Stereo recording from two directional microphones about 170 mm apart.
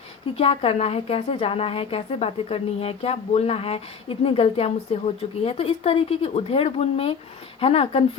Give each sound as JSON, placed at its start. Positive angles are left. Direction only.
{"t": 0.3, "sound": "a woman's voice", "side_deg": 35}